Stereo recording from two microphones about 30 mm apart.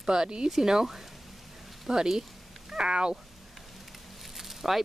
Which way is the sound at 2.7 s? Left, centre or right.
Right.